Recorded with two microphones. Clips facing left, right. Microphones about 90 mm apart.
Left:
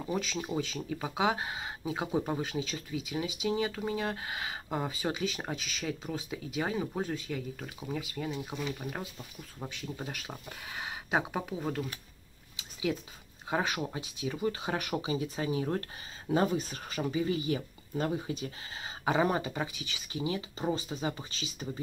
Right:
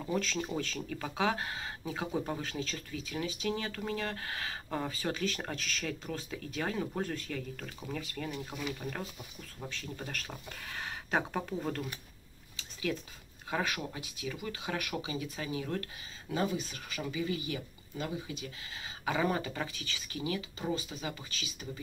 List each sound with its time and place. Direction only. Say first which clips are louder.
0.0 s speech: even; 10° left (ahead or behind)
12.5 s a sound: left 3 dB; 15° left (ahead or behind)
13.5 s speech: left 3 dB; 20° left (ahead or behind)